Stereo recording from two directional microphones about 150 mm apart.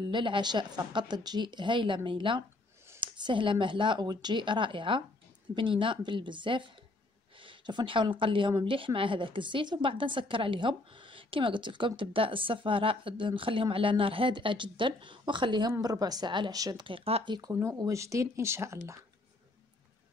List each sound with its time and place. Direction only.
0.1 s a woman's voice: 30° right (ahead or behind)
17.5 s speech: 15° right (ahead or behind)